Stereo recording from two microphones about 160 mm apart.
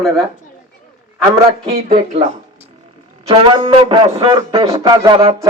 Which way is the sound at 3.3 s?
30° right (ahead or behind).